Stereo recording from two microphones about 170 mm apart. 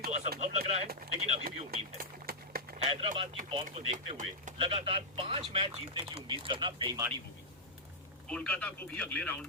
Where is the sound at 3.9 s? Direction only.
45° right (ahead or behind).